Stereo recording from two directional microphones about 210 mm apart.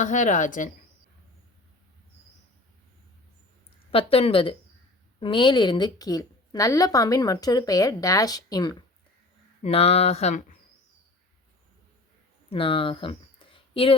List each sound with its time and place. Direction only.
0.0 s a woman's voice: 35° left (ahead or behind)
3.9 s a woman's voice: 25° left (ahead or behind)
12.5 s speech: 25° left (ahead or behind)